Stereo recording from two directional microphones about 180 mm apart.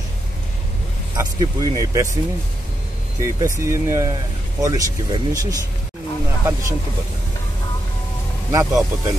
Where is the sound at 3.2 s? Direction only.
15° right (ahead or behind).